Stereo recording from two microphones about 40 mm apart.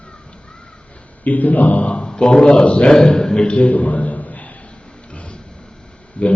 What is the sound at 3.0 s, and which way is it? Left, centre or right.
Speech, centre.